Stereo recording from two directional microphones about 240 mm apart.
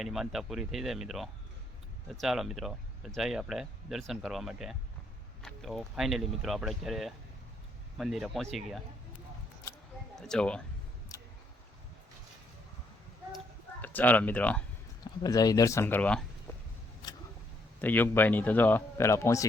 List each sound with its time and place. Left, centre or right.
0.0 s speech: centre
10.2 s speech: centre
11.1 s a sound: centre
13.8 s speech: centre
15.0 s speech: centre
17.7 s speech: centre